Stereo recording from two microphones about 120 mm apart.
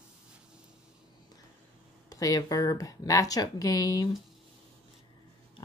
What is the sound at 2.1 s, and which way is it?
Speech, 30° left (ahead or behind).